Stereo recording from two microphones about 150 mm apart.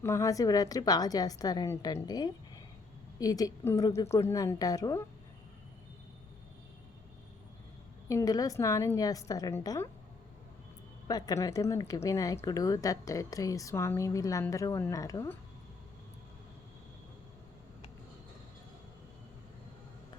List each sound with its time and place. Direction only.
0.0 s a woman's voice: 20° left (ahead or behind)
8.0 s a woman's voice: 20° left (ahead or behind)
11.1 s a woman's voice: 25° left (ahead or behind)